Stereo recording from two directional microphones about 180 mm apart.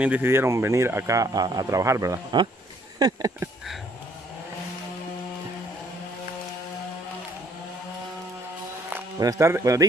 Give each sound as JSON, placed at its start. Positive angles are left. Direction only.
{"t": 0.0, "sound": "speech", "side_deg": -10}
{"t": 8.9, "sound": "speech", "side_deg": -15}